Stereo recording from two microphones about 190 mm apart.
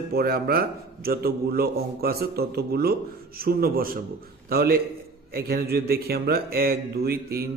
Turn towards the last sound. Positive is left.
turn(degrees=-55)  # may be behind; listen again after turning